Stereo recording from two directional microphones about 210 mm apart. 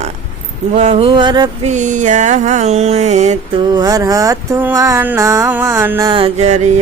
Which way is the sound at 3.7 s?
20° right (ahead or behind).